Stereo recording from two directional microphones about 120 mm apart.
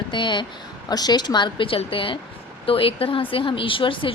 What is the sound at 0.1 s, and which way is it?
A woman's voice, 40° left (ahead or behind).